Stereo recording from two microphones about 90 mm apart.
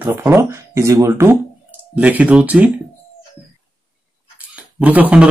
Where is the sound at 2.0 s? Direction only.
15° right (ahead or behind).